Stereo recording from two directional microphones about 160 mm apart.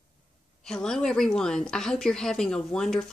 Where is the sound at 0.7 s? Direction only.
5° left (ahead or behind).